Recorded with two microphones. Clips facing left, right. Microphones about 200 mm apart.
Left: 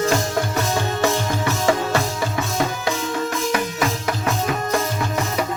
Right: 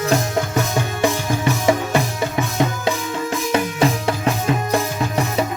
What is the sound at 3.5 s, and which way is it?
Music, 30° right (ahead or behind).